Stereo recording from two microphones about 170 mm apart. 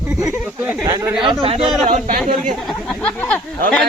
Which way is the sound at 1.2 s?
30° right (ahead or behind).